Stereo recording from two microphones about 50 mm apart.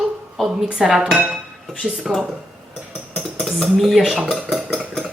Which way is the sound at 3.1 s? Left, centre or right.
Centre.